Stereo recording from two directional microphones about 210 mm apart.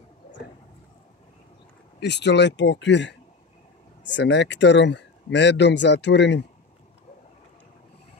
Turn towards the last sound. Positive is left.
turn(degrees=55)  # may be behind; listen again after turning